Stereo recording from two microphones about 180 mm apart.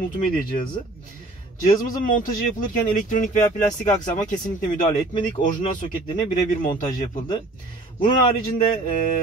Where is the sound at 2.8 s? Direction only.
45° left (ahead or behind).